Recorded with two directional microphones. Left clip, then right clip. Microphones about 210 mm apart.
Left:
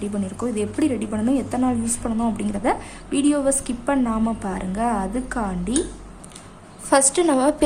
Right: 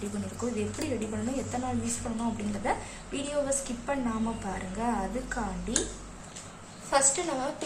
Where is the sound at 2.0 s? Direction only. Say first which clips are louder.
Left 9 dB; 45° left (ahead or behind).